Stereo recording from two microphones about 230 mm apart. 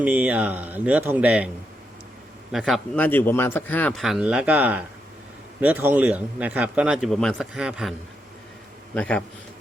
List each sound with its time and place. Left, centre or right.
0.0 s speech: centre
2.5 s a man's voice: centre
9.0 s a man's voice: centre